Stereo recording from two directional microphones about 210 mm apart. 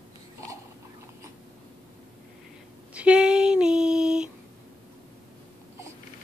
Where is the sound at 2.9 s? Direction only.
5° right (ahead or behind).